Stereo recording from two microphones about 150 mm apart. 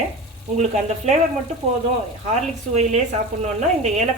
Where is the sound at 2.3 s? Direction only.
50° right (ahead or behind).